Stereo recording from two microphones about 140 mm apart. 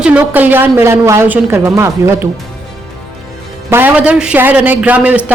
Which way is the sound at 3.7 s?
15° right (ahead or behind).